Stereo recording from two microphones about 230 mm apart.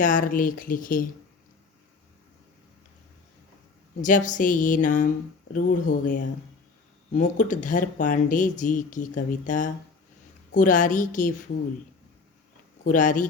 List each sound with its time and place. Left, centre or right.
0.0 s speech: left
4.0 s speech: left
12.8 s speech: left